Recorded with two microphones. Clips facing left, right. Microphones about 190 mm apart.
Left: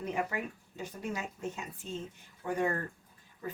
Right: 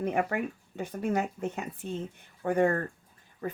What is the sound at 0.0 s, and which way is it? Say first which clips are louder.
Speech: right 6 dB; 55° right (ahead or behind).